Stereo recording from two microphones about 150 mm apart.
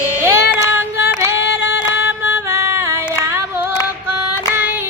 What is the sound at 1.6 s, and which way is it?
Music, 15° right (ahead or behind).